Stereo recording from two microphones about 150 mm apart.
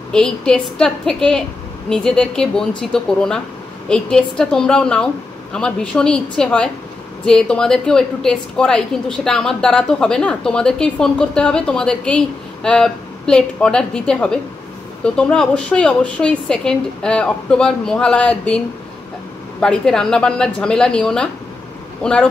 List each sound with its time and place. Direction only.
0.1 s a woman's voice: 5° left (ahead or behind)
19.6 s a woman's voice: 5° left (ahead or behind)